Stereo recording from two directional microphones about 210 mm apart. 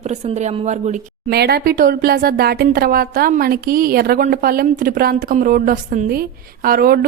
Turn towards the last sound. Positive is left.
turn(degrees=-45)  # may be behind; listen again after turning